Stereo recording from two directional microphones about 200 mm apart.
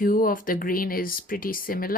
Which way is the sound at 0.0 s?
45° left (ahead or behind).